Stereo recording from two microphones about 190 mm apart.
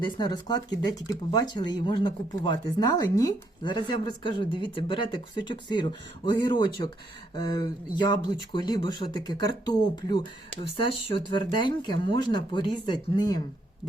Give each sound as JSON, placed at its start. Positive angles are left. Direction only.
{"t": 0.0, "sound": "speech", "side_deg": 20}